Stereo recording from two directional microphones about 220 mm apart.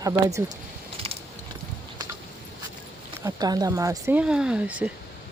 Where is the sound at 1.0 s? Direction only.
25° right (ahead or behind).